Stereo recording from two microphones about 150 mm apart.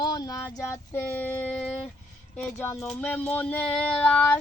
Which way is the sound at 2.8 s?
5° left (ahead or behind).